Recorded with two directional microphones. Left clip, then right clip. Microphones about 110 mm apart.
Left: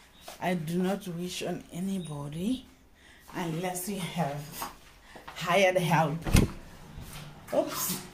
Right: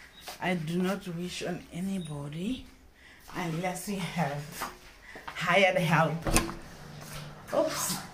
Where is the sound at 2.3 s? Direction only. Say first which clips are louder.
Left 4 dB; 50° left (ahead or behind).